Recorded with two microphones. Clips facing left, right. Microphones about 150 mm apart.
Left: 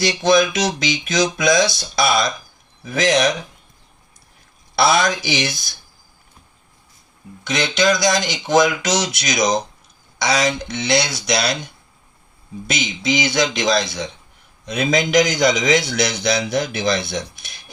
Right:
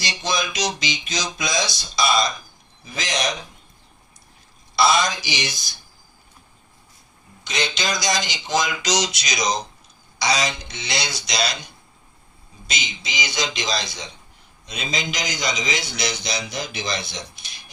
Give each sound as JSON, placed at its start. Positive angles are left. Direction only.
{"t": 0.2, "sound": "a man's voice", "side_deg": 55}
{"t": 4.7, "sound": "a man's voice", "side_deg": 60}
{"t": 7.4, "sound": "a man's voice", "side_deg": 55}
{"t": 12.6, "sound": "a man's voice", "side_deg": 55}